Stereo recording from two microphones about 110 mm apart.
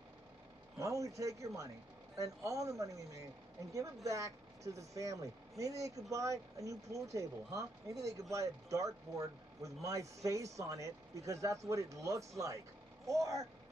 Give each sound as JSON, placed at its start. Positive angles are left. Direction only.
{"t": 0.7, "sound": "speech", "side_deg": -30}